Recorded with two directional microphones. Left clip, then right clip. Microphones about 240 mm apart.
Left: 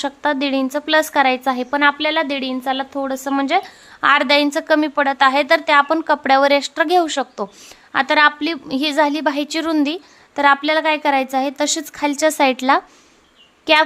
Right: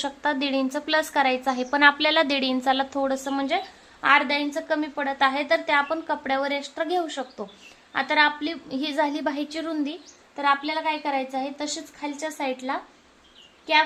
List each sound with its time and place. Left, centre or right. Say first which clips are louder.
0.0 s a woman's voice: left 6 dB; left
3.3 s a woman's voice: left 8 dB; left